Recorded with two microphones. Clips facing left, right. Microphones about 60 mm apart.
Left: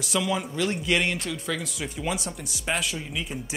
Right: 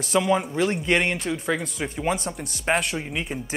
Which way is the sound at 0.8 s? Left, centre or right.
Right.